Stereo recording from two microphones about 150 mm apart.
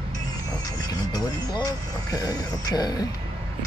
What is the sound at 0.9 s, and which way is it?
Speech, 25° left (ahead or behind).